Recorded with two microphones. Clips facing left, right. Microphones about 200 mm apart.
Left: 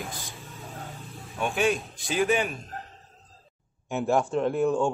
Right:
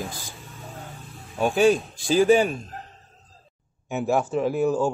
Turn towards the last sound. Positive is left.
turn(degrees=0)  # may be behind; listen again after turning